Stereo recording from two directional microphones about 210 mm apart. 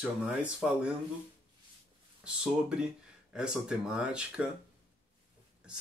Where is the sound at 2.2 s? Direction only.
5° right (ahead or behind).